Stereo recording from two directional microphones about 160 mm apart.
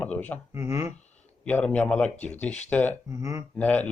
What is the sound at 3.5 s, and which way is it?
Speech, 10° left (ahead or behind).